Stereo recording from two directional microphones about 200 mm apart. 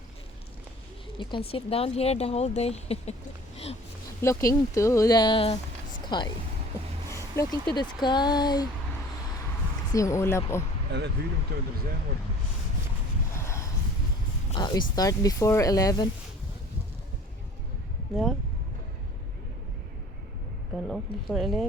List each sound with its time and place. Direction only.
1.2 s speech: 25° left (ahead or behind)
4.2 s speech: 15° left (ahead or behind)
7.1 s a sound: 15° left (ahead or behind)
7.8 s speech: 20° left (ahead or behind)
9.9 s speech: 15° left (ahead or behind)
10.9 s speech: 55° right (ahead or behind)
13.3 s a sound: 15° left (ahead or behind)
14.5 s speech: 20° left (ahead or behind)
18.1 s speech: centre (ahead or behind)
20.8 s speech: centre (ahead or behind)